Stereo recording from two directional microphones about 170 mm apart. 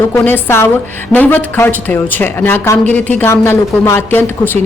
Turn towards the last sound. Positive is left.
turn(degrees=10)  # may be behind; listen again after turning